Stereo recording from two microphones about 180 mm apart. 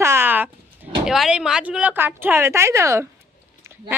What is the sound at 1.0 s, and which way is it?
A woman's voice, centre (ahead or behind).